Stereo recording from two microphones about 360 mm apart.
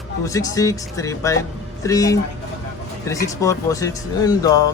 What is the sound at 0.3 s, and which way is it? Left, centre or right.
A man's voice, centre.